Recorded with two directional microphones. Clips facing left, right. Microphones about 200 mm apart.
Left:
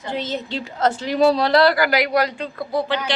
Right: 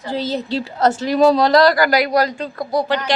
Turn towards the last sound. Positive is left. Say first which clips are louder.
# right 3 dB
turn(degrees=-40)  # may be behind; listen again after turning